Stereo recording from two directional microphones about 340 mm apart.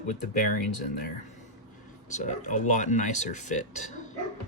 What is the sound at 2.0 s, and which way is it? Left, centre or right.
Speech, left.